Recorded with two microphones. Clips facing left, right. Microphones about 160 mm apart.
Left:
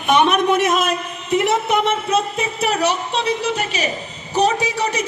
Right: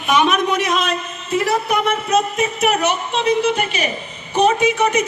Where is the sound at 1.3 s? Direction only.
20° left (ahead or behind).